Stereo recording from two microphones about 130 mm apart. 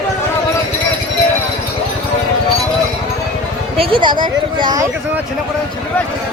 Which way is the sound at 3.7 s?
45° right (ahead or behind).